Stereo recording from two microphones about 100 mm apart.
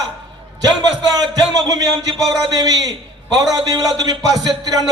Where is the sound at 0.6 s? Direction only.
40° right (ahead or behind).